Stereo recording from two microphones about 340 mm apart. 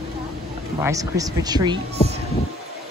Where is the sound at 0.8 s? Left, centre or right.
Centre.